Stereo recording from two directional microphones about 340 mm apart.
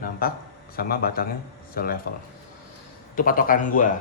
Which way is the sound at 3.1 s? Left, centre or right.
Left.